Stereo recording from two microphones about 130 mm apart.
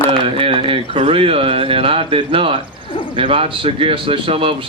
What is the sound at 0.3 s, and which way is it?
A man's voice, 45° right (ahead or behind).